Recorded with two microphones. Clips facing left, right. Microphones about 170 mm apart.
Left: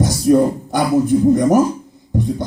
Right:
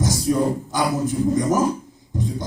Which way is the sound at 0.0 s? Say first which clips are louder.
Left 7 dB; 60° left (ahead or behind).